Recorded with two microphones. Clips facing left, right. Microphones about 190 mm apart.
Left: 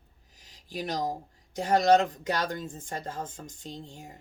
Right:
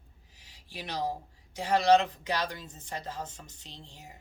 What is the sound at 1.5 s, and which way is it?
Speech, 45° left (ahead or behind).